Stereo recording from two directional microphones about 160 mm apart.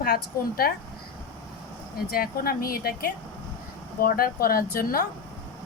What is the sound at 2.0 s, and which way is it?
Speech, 70° left (ahead or behind).